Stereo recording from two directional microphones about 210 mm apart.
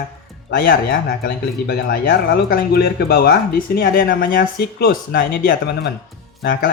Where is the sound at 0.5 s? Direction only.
45° left (ahead or behind).